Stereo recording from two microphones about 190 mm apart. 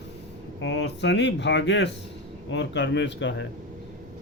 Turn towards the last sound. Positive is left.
turn(degrees=65)  # may be behind; listen again after turning